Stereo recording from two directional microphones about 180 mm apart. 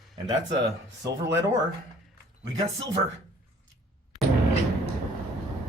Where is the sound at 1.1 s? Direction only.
75° right (ahead or behind).